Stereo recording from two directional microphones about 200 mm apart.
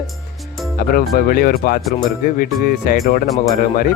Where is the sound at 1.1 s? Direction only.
50° left (ahead or behind).